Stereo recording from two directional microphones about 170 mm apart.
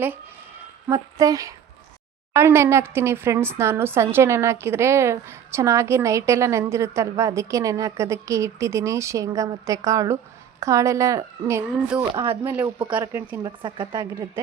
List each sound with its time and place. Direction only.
0.9 s a woman's voice: 20° right (ahead or behind)
13.6 s a woman's voice: 25° right (ahead or behind)